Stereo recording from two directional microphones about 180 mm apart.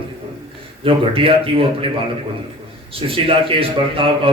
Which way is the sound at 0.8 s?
30° right (ahead or behind).